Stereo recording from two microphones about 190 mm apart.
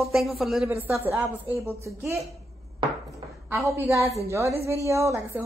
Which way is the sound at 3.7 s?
10° right (ahead or behind).